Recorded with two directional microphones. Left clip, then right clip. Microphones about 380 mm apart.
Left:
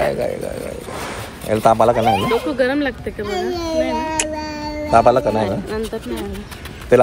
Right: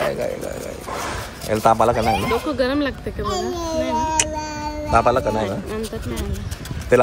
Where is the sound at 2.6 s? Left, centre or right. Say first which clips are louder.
Left 2 dB; right.